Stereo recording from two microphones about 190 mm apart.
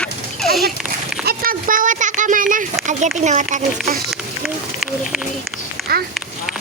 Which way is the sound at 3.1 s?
40° right (ahead or behind).